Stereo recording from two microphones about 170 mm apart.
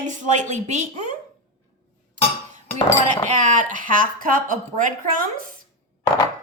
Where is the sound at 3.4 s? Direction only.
45° right (ahead or behind).